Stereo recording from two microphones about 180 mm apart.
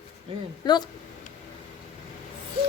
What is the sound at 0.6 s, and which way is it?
Speech, 25° left (ahead or behind).